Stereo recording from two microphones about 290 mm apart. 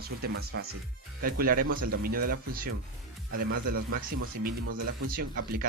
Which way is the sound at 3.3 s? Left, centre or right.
Right.